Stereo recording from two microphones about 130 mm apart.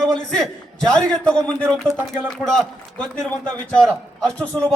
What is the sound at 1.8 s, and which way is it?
Speech, 20° right (ahead or behind).